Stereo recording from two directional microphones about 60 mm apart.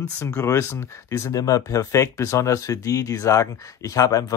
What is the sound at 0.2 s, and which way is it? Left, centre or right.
Speech, left.